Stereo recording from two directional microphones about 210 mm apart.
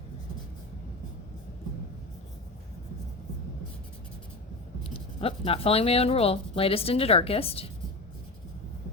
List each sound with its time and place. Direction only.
4.8 s speech: 25° left (ahead or behind)